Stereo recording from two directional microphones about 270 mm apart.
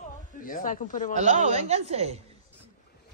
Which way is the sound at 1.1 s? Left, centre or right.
Right.